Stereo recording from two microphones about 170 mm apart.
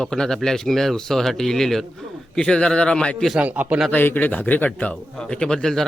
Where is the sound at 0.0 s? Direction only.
5° left (ahead or behind).